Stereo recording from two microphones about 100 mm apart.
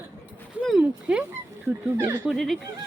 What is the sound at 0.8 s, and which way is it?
Speech, 15° right (ahead or behind).